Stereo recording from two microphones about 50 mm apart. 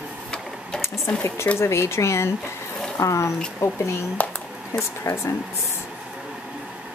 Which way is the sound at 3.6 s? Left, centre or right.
Left.